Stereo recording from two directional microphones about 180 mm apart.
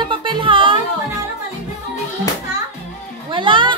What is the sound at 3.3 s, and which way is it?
Music, 25° right (ahead or behind).